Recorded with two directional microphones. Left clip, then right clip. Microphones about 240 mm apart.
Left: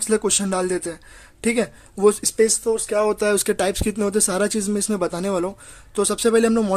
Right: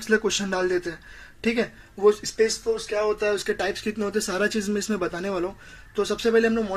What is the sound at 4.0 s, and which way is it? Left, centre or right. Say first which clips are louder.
Speech: left 4 dB; left.